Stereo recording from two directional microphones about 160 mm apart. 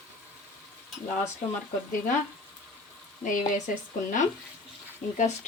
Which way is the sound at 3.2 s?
10° left (ahead or behind).